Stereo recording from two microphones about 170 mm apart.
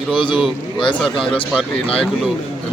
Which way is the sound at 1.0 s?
5° left (ahead or behind).